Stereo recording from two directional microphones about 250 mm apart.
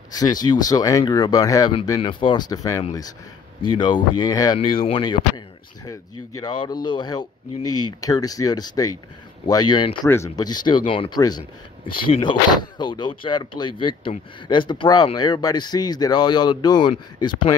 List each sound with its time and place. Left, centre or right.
0.1 s speech: centre